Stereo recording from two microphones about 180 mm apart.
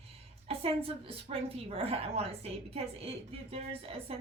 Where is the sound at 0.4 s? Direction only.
30° right (ahead or behind).